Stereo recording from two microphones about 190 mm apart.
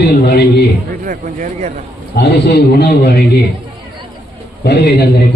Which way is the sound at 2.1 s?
65° left (ahead or behind).